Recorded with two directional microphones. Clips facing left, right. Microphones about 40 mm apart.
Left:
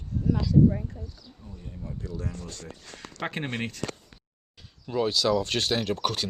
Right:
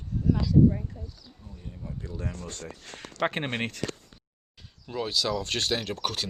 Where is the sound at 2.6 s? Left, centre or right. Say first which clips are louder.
Right 1 dB; right.